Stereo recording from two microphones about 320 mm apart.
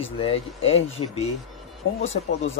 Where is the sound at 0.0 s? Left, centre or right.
Centre.